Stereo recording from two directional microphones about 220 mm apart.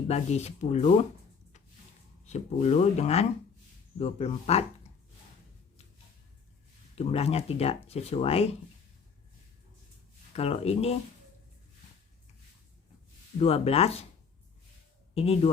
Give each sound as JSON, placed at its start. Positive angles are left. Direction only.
{"t": 0.1, "sound": "speech", "side_deg": 30}
{"t": 2.2, "sound": "speech", "side_deg": 30}
{"t": 6.9, "sound": "speech", "side_deg": 30}
{"t": 10.3, "sound": "speech", "side_deg": 30}
{"t": 13.4, "sound": "speech", "side_deg": 25}
{"t": 15.1, "sound": "speech", "side_deg": 25}